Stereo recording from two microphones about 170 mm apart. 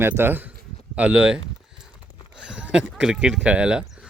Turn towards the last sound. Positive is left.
turn(degrees=-5)  # may be behind; listen again after turning